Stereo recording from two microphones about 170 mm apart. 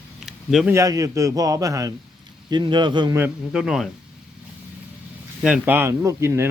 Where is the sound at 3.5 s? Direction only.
Centre (ahead or behind).